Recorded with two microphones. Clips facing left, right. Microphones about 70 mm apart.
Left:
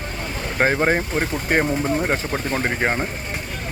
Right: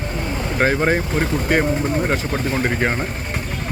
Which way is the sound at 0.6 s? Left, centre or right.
Centre.